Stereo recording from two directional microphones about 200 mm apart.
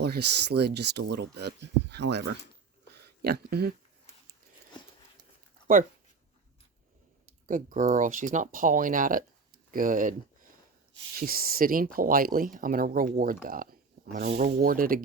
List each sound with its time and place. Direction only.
0.0 s speech: 55° right (ahead or behind)
7.4 s speech: 40° right (ahead or behind)